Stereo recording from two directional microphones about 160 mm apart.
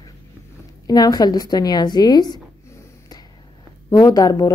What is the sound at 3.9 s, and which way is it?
Speech, 20° left (ahead or behind).